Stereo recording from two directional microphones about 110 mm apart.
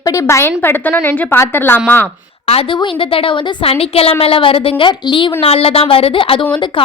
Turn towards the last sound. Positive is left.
turn(degrees=45)  # may be behind; listen again after turning